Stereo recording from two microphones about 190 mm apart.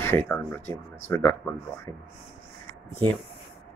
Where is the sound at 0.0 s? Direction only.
10° left (ahead or behind).